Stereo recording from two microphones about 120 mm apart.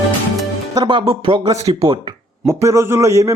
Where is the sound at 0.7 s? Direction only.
40° right (ahead or behind).